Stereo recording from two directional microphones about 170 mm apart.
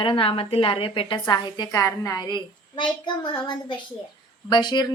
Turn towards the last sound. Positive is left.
turn(degrees=25)  # may be behind; listen again after turning